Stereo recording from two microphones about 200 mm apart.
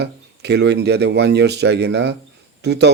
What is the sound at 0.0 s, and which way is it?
Speech, 55° right (ahead or behind).